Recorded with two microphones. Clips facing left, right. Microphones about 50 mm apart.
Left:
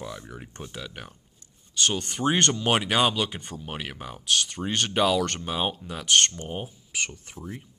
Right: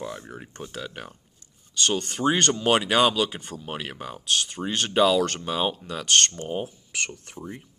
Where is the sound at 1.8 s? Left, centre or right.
Centre.